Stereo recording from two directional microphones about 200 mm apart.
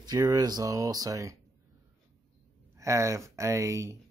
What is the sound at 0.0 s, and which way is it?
Speech, 20° right (ahead or behind).